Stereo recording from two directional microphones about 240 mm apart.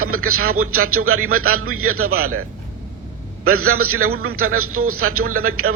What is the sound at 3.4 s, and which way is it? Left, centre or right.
A man's voice, right.